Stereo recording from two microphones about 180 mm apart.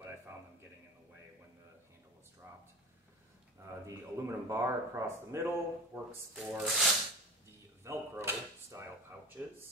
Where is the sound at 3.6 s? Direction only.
15° right (ahead or behind).